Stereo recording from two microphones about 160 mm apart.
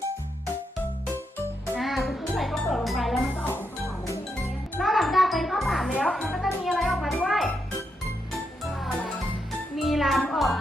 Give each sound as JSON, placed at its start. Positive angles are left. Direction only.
{"t": 1.7, "sound": "music", "side_deg": 0}
{"t": 3.4, "sound": "music", "side_deg": 15}
{"t": 4.8, "sound": "music", "side_deg": 0}